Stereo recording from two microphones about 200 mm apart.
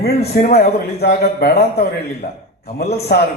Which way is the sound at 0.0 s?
50° left (ahead or behind).